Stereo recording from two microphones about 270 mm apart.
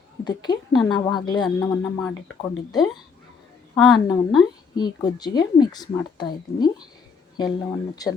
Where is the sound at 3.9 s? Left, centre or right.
Centre.